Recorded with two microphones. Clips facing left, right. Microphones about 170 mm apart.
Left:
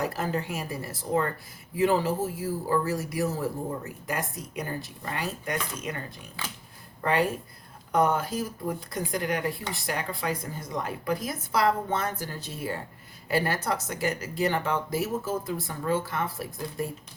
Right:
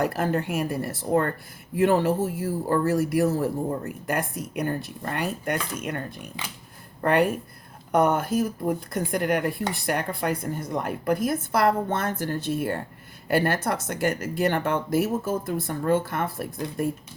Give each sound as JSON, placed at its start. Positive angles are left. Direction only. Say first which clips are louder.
{"t": 0.0, "sound": "speech", "louder": "right 5 dB", "side_deg": -60}